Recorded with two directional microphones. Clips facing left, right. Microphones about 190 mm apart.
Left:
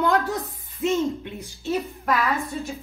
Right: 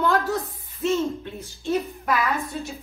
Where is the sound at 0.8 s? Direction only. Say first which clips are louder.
Left 1 dB; 15° left (ahead or behind).